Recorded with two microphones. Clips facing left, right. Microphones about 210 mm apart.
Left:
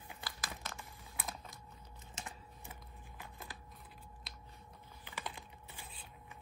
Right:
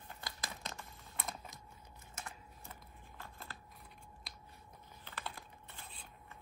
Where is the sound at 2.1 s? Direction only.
15° left (ahead or behind).